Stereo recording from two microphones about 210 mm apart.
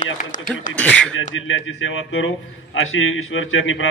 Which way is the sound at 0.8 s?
5° left (ahead or behind).